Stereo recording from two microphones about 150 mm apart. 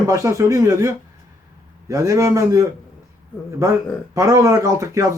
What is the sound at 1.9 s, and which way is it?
Speech, 20° right (ahead or behind).